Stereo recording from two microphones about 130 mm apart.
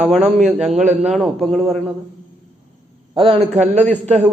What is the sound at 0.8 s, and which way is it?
Speech, 70° right (ahead or behind).